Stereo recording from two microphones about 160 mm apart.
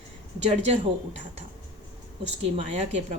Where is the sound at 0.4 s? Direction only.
45° right (ahead or behind).